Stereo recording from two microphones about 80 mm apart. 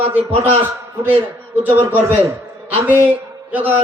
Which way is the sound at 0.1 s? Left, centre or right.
Right.